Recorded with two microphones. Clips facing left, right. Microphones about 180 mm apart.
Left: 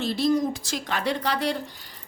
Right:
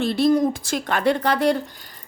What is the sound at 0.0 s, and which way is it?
A woman's voice, 55° right (ahead or behind).